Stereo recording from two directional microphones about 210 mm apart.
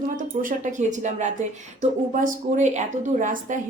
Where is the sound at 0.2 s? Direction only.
35° right (ahead or behind).